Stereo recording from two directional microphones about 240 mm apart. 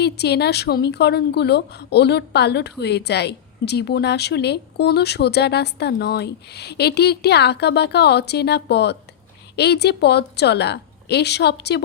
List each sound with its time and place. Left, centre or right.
0.0 s a woman's voice: left